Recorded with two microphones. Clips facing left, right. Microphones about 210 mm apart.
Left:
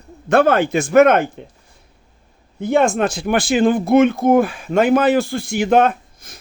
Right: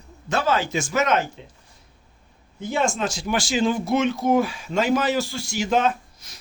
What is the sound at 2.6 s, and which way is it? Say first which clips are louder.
Speech: left 8 dB; 60° left (ahead or behind).